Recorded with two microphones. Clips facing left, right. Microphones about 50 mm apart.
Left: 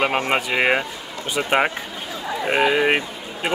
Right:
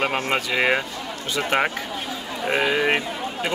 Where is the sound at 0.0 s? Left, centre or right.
Left.